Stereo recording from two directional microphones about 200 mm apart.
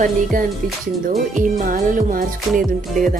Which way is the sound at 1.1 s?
40° right (ahead or behind).